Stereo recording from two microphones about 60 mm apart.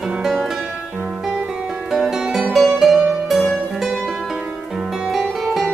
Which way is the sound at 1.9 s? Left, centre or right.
Centre.